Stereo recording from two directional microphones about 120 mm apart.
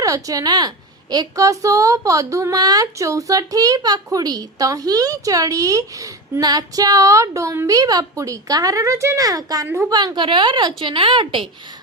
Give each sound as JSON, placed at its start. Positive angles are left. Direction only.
{"t": 0.0, "sound": "a woman's voice", "side_deg": -30}
{"t": 9.6, "sound": "a woman's voice", "side_deg": -15}
{"t": 9.9, "sound": "a woman's voice", "side_deg": -35}